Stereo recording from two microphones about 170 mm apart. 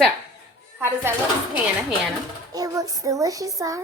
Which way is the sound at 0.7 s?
15° right (ahead or behind).